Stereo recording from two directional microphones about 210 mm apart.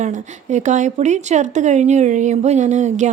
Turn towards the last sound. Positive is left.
turn(degrees=-35)  # may be behind; listen again after turning